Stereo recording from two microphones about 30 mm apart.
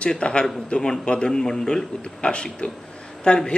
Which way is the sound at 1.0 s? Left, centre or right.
Left.